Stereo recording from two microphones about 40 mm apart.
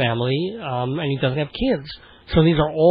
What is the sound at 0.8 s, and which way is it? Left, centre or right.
Speech, left.